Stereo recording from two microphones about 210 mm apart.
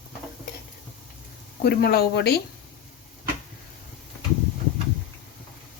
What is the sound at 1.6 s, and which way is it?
Speech, 50° left (ahead or behind).